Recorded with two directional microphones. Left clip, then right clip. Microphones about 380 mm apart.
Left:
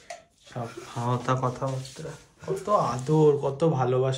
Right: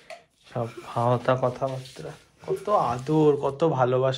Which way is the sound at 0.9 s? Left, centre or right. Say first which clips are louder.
Right 5 dB; centre.